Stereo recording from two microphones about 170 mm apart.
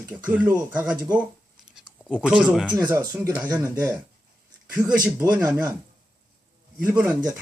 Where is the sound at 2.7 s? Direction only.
20° right (ahead or behind).